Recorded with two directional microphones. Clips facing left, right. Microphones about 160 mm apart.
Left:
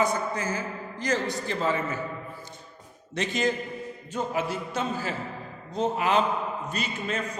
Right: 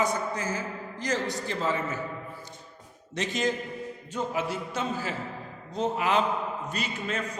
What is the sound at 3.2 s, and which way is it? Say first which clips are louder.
A man's voice: left 2 dB; 55° left (ahead or behind).